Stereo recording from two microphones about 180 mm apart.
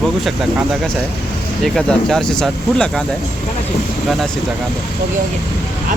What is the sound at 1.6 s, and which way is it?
Speech, centre (ahead or behind).